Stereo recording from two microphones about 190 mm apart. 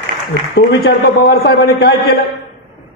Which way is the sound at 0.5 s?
55° left (ahead or behind).